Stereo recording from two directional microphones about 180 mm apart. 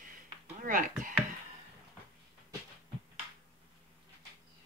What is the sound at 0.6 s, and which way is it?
Speech, 50° right (ahead or behind).